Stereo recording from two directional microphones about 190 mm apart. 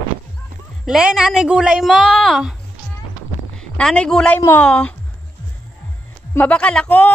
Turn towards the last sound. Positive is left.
turn(degrees=5)  # may be behind; listen again after turning